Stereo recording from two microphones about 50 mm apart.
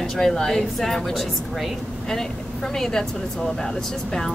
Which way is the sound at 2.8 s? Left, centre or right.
Centre.